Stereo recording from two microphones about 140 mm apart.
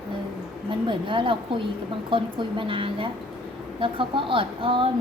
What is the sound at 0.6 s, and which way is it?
Speech, 35° right (ahead or behind).